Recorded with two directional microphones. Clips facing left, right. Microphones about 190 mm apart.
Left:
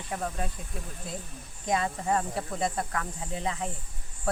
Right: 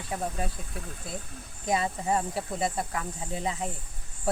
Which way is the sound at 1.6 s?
10° right (ahead or behind).